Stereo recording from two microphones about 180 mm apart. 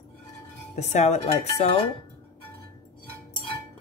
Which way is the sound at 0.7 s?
40° left (ahead or behind).